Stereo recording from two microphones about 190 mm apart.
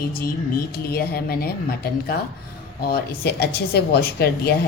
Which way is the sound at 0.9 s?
55° left (ahead or behind).